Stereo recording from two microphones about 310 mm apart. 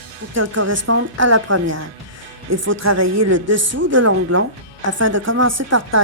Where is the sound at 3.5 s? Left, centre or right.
Right.